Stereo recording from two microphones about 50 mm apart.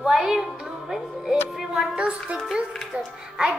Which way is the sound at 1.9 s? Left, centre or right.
Right.